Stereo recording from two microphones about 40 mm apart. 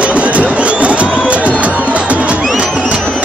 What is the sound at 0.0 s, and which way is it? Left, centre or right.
Crowd, right.